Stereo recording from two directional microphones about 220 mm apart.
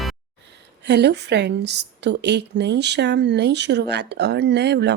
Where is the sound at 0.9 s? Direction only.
50° right (ahead or behind).